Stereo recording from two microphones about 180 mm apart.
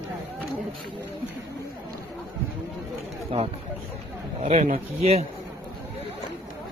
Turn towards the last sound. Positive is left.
turn(degrees=-35)  # may be behind; listen again after turning